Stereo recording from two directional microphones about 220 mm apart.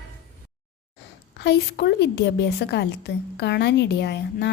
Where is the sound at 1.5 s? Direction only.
45° left (ahead or behind).